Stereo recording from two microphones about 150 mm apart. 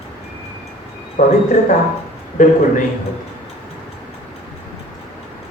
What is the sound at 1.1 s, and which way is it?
A man's voice, 65° left (ahead or behind).